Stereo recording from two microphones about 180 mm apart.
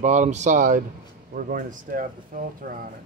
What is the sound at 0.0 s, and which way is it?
Speech, 40° right (ahead or behind).